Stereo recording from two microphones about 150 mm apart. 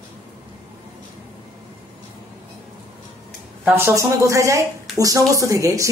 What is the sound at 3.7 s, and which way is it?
Speech, 15° right (ahead or behind).